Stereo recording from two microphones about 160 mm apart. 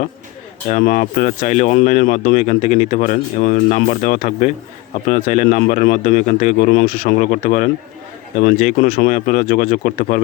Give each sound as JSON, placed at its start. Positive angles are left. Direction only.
{"t": 0.7, "sound": "speech", "side_deg": 50}